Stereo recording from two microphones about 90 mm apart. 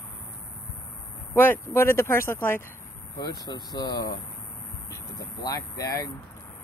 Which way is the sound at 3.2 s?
50° left (ahead or behind).